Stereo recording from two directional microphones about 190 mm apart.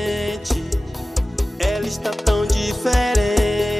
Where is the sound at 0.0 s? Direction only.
Centre (ahead or behind).